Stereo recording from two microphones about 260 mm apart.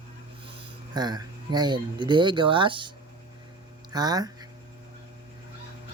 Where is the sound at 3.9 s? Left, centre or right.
Centre.